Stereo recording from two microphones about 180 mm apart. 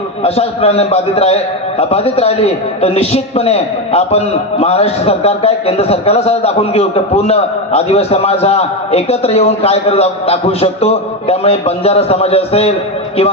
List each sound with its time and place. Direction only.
0.2 s a man's voice: 35° left (ahead or behind)